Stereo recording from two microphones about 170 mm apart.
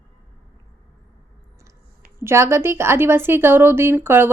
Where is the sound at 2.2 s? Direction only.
15° right (ahead or behind).